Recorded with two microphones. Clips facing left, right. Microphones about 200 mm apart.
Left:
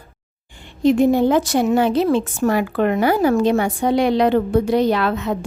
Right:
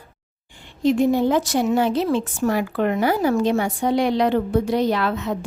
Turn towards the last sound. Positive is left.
turn(degrees=65)  # may be behind; listen again after turning